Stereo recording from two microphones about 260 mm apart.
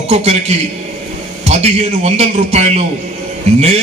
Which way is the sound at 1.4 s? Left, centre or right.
Right.